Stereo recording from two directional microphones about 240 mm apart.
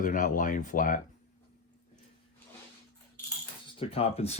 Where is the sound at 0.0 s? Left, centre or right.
Left.